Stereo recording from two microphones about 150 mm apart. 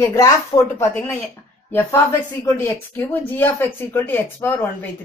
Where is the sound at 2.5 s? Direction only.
15° left (ahead or behind).